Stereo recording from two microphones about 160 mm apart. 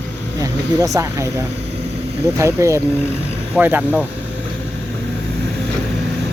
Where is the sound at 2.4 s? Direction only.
20° right (ahead or behind).